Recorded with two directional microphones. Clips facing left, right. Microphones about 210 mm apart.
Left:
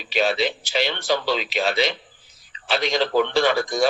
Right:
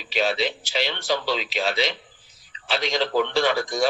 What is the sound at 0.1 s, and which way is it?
A man's voice, 55° left (ahead or behind).